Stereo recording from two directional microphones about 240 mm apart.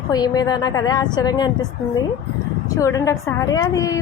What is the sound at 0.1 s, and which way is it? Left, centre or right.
A woman's voice, centre.